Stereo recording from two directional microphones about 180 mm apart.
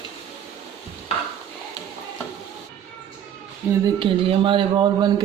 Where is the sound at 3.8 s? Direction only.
30° right (ahead or behind).